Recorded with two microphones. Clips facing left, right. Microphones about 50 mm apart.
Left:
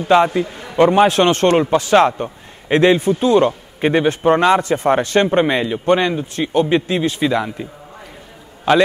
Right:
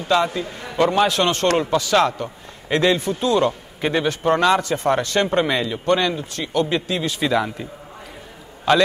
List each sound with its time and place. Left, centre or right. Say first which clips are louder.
0.0 s a man's voice: left 6 dB; left
6.6 s a man's voice: left 5 dB; left
7.2 s a man's voice: left 2 dB; centre